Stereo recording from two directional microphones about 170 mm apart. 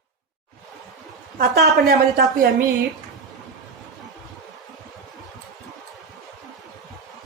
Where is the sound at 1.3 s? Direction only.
65° right (ahead or behind).